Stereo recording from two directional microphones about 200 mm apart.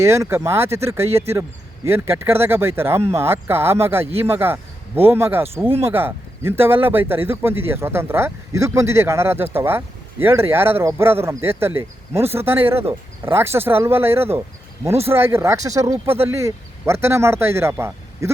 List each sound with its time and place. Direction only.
0.0 s speech: 15° right (ahead or behind)